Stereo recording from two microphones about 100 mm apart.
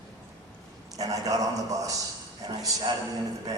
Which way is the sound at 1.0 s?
35° right (ahead or behind).